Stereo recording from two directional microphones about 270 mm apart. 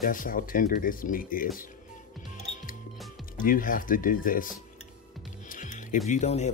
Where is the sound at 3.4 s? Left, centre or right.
Left.